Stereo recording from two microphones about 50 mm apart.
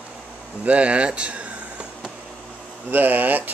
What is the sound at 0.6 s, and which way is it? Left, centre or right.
Speech, right.